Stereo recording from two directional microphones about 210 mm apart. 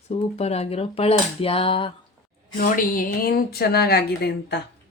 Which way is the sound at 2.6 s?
40° left (ahead or behind).